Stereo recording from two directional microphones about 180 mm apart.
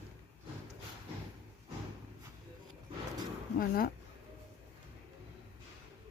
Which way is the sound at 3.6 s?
55° left (ahead or behind).